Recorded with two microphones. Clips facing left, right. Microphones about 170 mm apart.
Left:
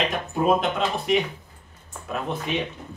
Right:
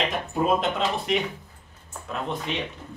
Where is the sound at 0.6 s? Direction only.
Centre (ahead or behind).